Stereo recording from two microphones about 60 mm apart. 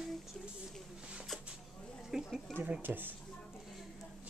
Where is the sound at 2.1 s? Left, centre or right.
Centre.